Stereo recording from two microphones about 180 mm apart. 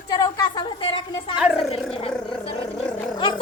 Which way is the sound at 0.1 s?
25° left (ahead or behind).